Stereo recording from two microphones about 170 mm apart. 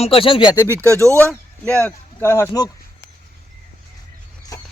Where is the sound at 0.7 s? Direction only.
15° right (ahead or behind).